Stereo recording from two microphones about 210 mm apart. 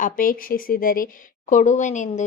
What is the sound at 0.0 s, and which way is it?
Speech, 40° left (ahead or behind).